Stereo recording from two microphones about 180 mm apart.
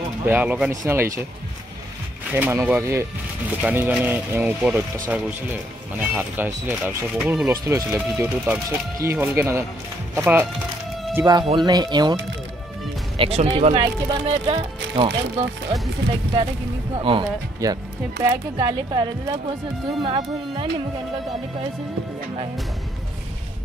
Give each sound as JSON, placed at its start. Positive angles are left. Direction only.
{"t": 0.2, "sound": "speech", "side_deg": -10}
{"t": 2.3, "sound": "speech", "side_deg": -10}
{"t": 13.2, "sound": "speech", "side_deg": -35}
{"t": 16.9, "sound": "speech", "side_deg": -30}